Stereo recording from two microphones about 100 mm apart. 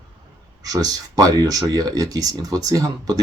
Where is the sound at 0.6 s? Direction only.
35° right (ahead or behind).